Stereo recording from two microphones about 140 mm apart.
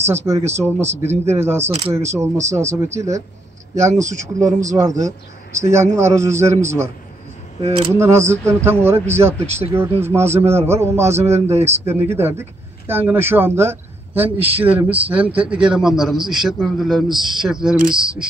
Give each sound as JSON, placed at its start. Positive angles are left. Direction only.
{"t": 0.0, "sound": "a man's voice", "side_deg": -20}
{"t": 7.6, "sound": "speech", "side_deg": -45}
{"t": 8.0, "sound": "a man's voice", "side_deg": -20}
{"t": 9.4, "sound": "speech", "side_deg": -50}
{"t": 10.0, "sound": "a man's voice", "side_deg": -15}